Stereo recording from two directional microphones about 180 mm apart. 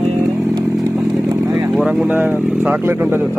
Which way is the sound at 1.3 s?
20° right (ahead or behind).